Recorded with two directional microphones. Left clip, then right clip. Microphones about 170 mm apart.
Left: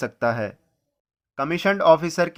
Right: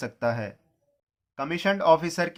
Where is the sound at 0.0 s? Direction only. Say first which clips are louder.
Left 5 dB; 40° left (ahead or behind).